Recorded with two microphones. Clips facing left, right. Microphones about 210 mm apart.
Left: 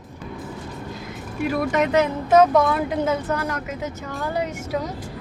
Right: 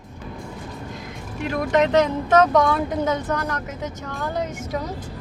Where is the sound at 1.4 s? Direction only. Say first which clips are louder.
Right 1 dB; 5° left (ahead or behind).